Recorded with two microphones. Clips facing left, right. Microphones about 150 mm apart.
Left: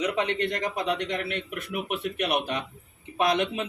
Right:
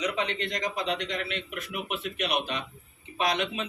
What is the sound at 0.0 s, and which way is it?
A man's voice, 55° left (ahead or behind).